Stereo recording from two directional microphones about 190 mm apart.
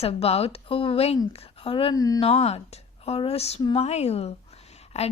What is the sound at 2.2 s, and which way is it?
A woman's voice, 30° left (ahead or behind).